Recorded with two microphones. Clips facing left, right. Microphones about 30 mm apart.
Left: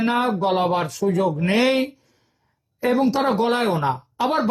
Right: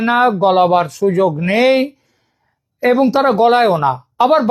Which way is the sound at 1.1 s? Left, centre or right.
Right.